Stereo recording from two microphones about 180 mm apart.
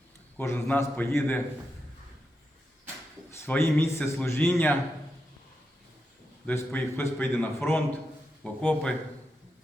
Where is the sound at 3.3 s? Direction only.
10° left (ahead or behind).